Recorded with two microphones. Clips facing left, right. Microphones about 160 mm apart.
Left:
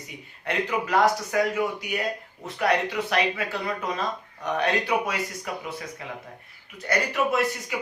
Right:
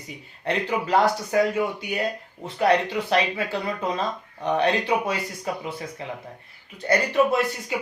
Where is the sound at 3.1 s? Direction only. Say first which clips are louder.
Right 4 dB; 30° right (ahead or behind).